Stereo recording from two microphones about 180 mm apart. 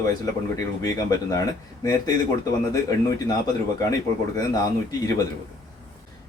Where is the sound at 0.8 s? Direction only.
20° left (ahead or behind).